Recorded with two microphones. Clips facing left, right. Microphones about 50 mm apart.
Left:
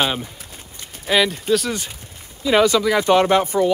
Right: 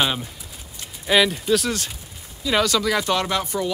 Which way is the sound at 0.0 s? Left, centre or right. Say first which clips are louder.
Left 1 dB; centre.